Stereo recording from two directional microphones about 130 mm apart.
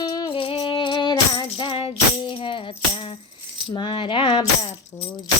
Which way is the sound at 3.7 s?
35° left (ahead or behind).